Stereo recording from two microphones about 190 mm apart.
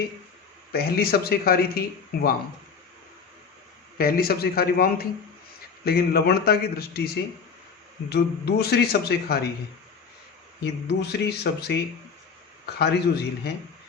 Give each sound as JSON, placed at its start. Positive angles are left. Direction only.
{"t": 0.7, "sound": "a man's voice", "side_deg": 55}
{"t": 3.9, "sound": "a man's voice", "side_deg": 50}
{"t": 8.1, "sound": "a man's voice", "side_deg": 60}
{"t": 10.6, "sound": "a man's voice", "side_deg": 60}